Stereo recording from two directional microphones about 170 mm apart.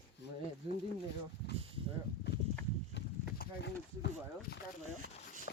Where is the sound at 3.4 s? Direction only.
80° left.